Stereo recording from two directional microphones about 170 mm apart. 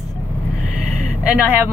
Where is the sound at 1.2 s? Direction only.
10° right (ahead or behind).